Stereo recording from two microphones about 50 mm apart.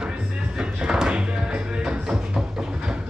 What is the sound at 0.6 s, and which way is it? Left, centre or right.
Music, centre.